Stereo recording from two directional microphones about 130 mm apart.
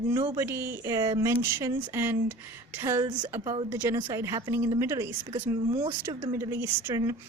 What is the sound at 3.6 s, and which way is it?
Speech, 15° right (ahead or behind).